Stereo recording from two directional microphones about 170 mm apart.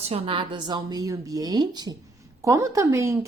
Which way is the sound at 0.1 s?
30° right (ahead or behind).